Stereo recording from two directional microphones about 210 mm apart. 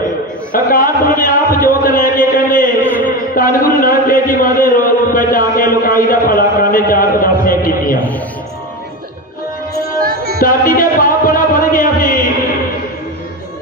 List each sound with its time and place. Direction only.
0.5 s a sound: 40° left (ahead or behind)
3.1 s a man's voice: 40° left (ahead or behind)
10.0 s music: 45° right (ahead or behind)
10.4 s music: 40° left (ahead or behind)